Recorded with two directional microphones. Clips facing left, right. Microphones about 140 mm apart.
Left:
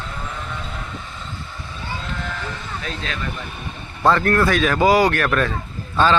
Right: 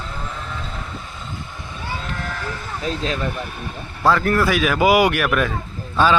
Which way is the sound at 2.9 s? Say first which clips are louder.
Right 8 dB; 35° right (ahead or behind).